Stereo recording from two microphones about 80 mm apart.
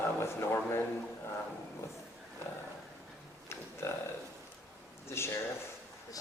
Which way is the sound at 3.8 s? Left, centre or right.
Left.